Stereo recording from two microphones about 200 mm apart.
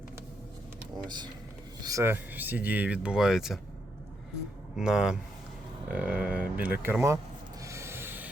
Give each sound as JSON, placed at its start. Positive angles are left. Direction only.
{"t": 1.0, "sound": "speech", "side_deg": -20}
{"t": 4.8, "sound": "speech", "side_deg": -5}
{"t": 7.6, "sound": "rub", "side_deg": -15}